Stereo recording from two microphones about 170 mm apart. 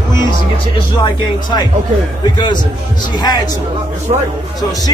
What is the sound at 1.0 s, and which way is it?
Music, 25° left (ahead or behind).